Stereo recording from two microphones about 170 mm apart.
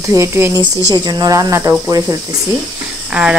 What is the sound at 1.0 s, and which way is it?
Speech, 25° right (ahead or behind).